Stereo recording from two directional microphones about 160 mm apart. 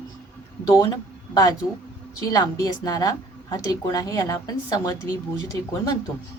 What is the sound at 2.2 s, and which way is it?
A woman's voice, 25° left (ahead or behind).